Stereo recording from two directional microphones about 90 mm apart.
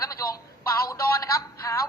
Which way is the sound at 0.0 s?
40° left (ahead or behind).